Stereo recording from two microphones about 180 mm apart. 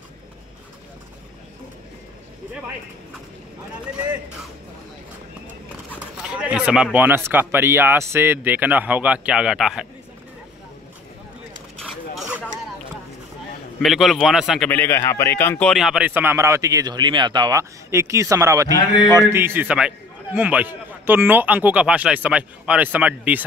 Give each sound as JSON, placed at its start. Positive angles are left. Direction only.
{"t": 5.9, "sound": "a man's voice", "side_deg": -5}
{"t": 11.8, "sound": "a sound", "side_deg": 0}
{"t": 13.7, "sound": "a man's voice", "side_deg": 0}
{"t": 14.7, "sound": "a man's voice", "side_deg": 10}
{"t": 15.7, "sound": "a man's voice", "side_deg": 0}